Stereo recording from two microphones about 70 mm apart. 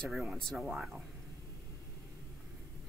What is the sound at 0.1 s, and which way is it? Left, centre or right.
Speech, centre.